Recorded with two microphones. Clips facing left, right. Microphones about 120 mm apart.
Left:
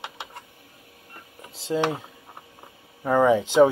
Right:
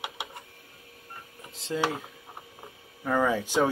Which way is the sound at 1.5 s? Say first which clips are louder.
Left 5 dB; 30° left (ahead or behind).